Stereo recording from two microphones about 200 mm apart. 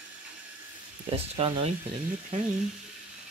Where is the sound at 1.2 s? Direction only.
30° right (ahead or behind).